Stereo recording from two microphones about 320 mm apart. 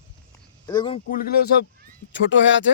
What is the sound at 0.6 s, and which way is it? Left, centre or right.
Speech, centre.